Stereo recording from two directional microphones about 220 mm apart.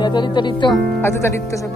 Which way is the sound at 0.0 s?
20° left (ahead or behind).